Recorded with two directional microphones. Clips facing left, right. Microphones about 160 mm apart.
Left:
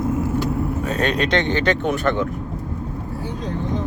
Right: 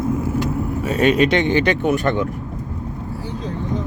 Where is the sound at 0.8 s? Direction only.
5° right (ahead or behind).